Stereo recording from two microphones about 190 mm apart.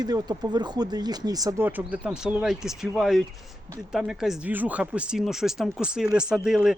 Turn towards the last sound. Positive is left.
turn(degrees=-5)  # may be behind; listen again after turning